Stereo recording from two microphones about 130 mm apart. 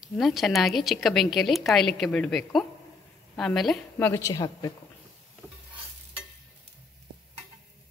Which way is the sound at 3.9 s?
20° left (ahead or behind).